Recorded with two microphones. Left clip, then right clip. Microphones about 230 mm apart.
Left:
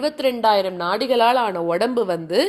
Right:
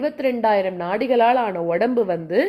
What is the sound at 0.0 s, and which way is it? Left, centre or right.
A woman's voice, left.